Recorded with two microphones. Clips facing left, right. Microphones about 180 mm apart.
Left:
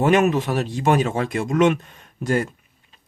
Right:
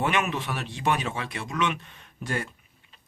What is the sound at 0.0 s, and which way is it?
Speech, 45° left (ahead or behind).